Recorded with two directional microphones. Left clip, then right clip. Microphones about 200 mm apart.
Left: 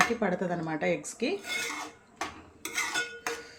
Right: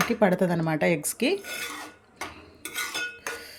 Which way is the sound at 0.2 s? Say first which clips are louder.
Right 7 dB; 55° right (ahead or behind).